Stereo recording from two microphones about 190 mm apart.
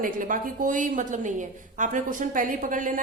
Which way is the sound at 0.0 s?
45° right (ahead or behind).